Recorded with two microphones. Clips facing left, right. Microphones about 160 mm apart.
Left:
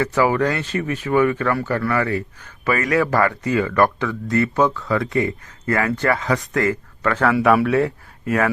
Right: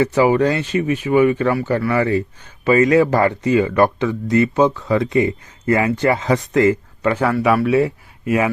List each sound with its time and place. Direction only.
0.0 s speech: 20° right (ahead or behind)